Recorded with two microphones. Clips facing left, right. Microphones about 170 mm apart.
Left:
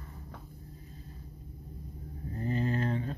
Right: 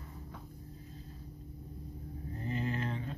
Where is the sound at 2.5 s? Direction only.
40° left (ahead or behind).